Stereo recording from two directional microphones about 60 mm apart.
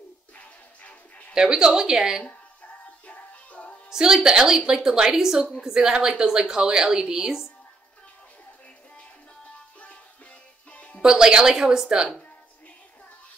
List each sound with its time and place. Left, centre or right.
0.4 s music: left
1.3 s a woman's voice: centre
3.1 s music: left
3.9 s a woman's voice: centre
10.7 s music: left
11.0 s a woman's voice: centre